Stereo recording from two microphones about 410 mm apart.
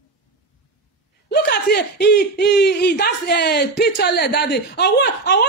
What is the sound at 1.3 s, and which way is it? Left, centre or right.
Speech, left.